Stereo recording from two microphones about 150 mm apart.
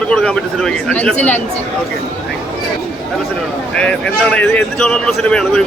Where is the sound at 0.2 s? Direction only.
5° left (ahead or behind).